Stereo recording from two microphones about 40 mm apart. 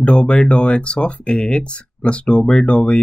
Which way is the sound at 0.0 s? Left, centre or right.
Left.